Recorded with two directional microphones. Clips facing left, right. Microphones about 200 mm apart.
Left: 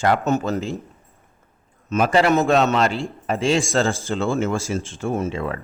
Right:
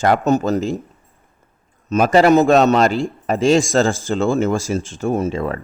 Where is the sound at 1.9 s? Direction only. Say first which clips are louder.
Right 5 dB; 40° right (ahead or behind).